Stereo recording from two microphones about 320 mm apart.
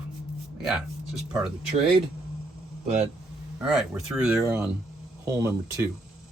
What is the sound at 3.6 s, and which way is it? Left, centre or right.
Speech, centre.